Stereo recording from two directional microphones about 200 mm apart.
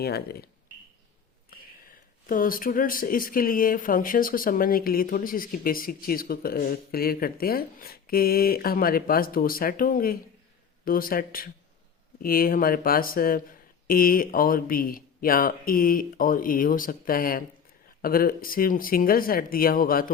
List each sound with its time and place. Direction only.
0.0 s speech: 50° left (ahead or behind)
2.2 s speech: 45° left (ahead or behind)